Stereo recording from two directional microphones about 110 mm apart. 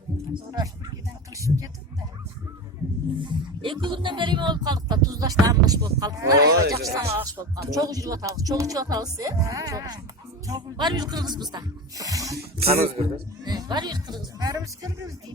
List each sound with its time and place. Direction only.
1.4 s speech: 30° right (ahead or behind)
3.2 s speech: 50° right (ahead or behind); by 12.5 s 30° right (ahead or behind)
12.6 s a man's voice: 65° right (ahead or behind)
13.4 s speech: 40° right (ahead or behind)